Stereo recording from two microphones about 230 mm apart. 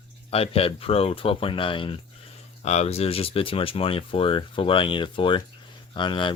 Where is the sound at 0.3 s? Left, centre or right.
Left.